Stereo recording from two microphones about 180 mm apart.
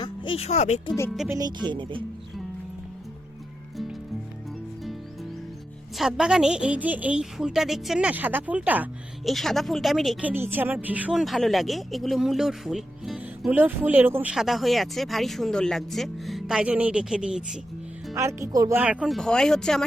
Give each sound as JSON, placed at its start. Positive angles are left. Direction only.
{"t": 0.0, "sound": "speech", "side_deg": 25}
{"t": 1.3, "sound": "speech", "side_deg": -20}
{"t": 6.0, "sound": "speech", "side_deg": -5}
{"t": 9.3, "sound": "speech", "side_deg": 0}
{"t": 18.1, "sound": "speech", "side_deg": -15}
{"t": 18.8, "sound": "speech", "side_deg": -5}